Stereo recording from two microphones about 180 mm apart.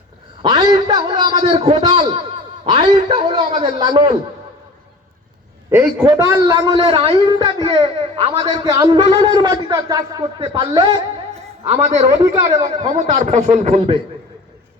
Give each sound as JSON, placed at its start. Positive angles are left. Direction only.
{"t": 0.4, "sound": "a sound", "side_deg": -25}
{"t": 1.1, "sound": "speech", "side_deg": -30}
{"t": 5.7, "sound": "a man's voice", "side_deg": -15}
{"t": 11.7, "sound": "a man's voice", "side_deg": -35}